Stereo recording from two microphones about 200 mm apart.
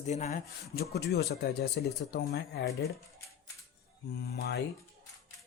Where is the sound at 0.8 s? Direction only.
55° left (ahead or behind).